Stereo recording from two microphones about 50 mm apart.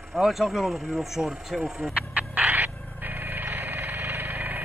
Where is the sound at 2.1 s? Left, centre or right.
Right.